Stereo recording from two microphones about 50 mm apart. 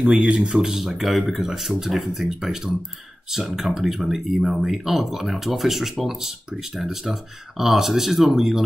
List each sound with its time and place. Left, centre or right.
0.0 s speech: right
0.6 s speech: centre